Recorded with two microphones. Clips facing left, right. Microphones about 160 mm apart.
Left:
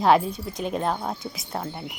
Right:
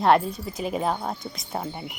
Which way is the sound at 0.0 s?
Centre (ahead or behind).